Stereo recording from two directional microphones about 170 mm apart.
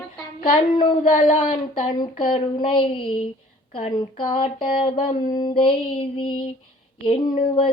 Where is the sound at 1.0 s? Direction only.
45° left (ahead or behind).